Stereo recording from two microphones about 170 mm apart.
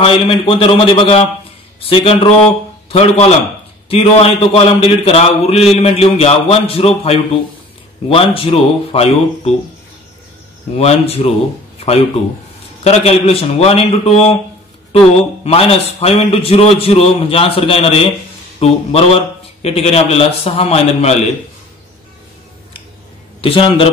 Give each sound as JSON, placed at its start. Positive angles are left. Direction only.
{"t": 0.0, "sound": "a man's voice", "side_deg": 30}
{"t": 10.8, "sound": "a man's voice", "side_deg": 35}
{"t": 12.8, "sound": "a man's voice", "side_deg": 35}
{"t": 15.4, "sound": "a man's voice", "side_deg": 35}
{"t": 23.4, "sound": "a man's voice", "side_deg": 35}